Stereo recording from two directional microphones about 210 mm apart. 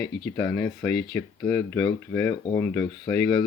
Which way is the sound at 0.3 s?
15° left (ahead or behind).